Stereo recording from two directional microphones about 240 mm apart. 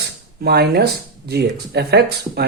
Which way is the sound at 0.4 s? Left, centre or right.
Right.